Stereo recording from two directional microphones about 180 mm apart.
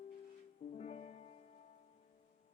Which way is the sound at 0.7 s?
35° left (ahead or behind).